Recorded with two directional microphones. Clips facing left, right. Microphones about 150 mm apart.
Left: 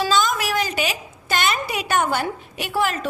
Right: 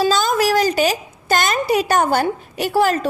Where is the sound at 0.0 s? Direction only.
35° right (ahead or behind).